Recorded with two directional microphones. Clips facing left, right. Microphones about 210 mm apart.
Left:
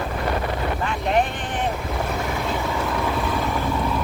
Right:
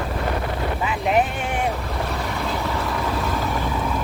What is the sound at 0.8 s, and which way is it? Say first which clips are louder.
Vehicle: right 2 dB; 5° right (ahead or behind).